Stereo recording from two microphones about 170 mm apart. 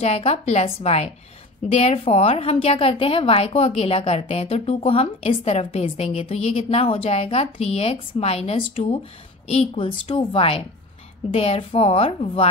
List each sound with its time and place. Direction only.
0.0 s a woman's voice: 35° left (ahead or behind)